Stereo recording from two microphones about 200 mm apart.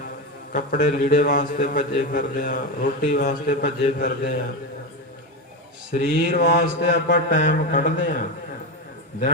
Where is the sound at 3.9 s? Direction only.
50° left (ahead or behind).